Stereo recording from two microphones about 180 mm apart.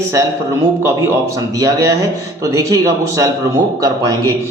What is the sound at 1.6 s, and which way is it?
A man's voice, 20° right (ahead or behind).